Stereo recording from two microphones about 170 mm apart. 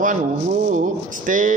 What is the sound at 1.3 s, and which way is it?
Speech, 50° right (ahead or behind).